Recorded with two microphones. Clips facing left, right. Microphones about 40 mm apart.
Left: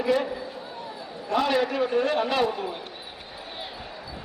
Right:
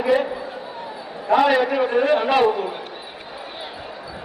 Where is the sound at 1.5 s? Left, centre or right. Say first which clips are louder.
Right 6 dB; centre.